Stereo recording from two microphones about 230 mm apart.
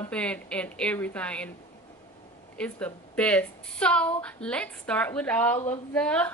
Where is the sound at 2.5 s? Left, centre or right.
Centre.